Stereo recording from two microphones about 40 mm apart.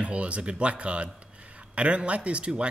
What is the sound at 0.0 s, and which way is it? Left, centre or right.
Speech, right.